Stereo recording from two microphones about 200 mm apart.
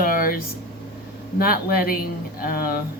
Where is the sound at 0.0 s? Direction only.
45° left (ahead or behind).